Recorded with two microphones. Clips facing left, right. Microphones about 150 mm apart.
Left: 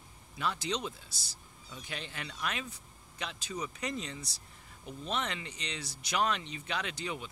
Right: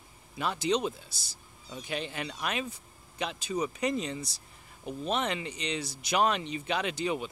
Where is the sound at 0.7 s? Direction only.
15° right (ahead or behind).